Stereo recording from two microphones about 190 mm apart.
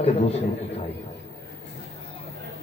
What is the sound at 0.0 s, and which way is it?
Speech, 35° left (ahead or behind).